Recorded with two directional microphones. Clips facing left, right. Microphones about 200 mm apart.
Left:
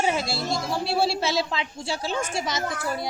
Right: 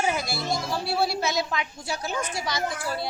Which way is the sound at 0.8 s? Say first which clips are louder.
Left 3 dB; 25° left (ahead or behind).